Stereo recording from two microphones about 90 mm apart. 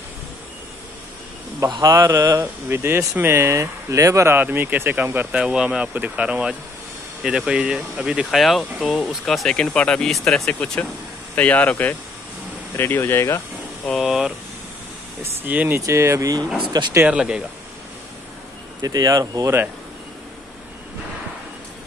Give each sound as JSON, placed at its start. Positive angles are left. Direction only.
{"t": 1.7, "sound": "speech", "side_deg": -50}
{"t": 2.7, "sound": "speech", "side_deg": -25}
{"t": 4.4, "sound": "speech", "side_deg": -20}
{"t": 5.4, "sound": "speech", "side_deg": -10}
{"t": 13.9, "sound": "speech", "side_deg": -5}
{"t": 15.4, "sound": "speech", "side_deg": -20}
{"t": 15.8, "sound": "speech", "side_deg": -30}
{"t": 16.6, "sound": "speech", "side_deg": -55}
{"t": 17.1, "sound": "speech", "side_deg": -10}
{"t": 18.8, "sound": "speech", "side_deg": -45}